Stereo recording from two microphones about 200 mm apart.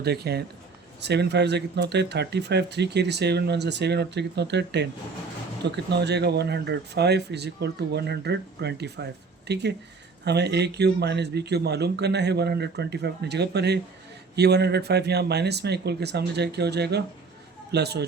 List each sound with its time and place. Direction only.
0.0 s a man's voice: 55° right (ahead or behind)